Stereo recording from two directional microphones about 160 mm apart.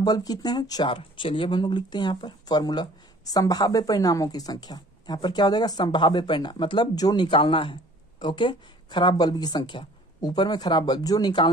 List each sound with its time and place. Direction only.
0.0 s speech: 25° left (ahead or behind)